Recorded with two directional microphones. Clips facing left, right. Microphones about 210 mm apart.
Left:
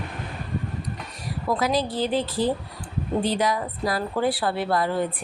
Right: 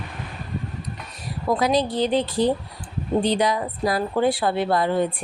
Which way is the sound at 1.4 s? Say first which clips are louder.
Right 3 dB; 20° right (ahead or behind).